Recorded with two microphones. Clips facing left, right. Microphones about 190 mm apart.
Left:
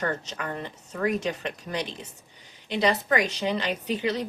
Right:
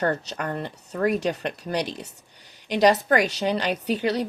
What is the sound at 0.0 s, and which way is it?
Speech, 40° right (ahead or behind).